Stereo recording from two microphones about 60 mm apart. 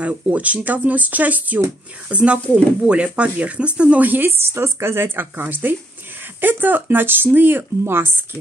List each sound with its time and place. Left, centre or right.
0.0 s speech: right